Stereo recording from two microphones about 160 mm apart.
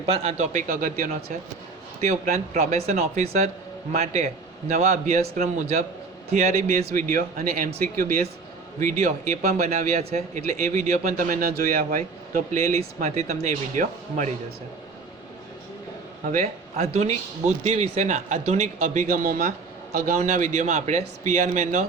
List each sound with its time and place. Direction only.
0.0 s a man's voice: 40° right (ahead or behind)
0.5 s speech: 55° right (ahead or behind)
2.0 s a man's voice: 45° right (ahead or behind)
6.9 s a man's voice: 60° right (ahead or behind)
16.3 s a man's voice: 45° right (ahead or behind)